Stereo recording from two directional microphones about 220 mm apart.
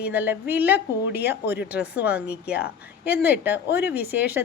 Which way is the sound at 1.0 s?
50° left (ahead or behind).